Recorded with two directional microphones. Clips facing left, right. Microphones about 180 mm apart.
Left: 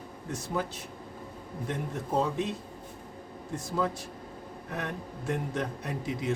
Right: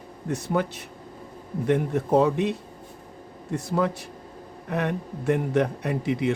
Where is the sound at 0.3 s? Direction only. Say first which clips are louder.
Right 7 dB; 65° right (ahead or behind).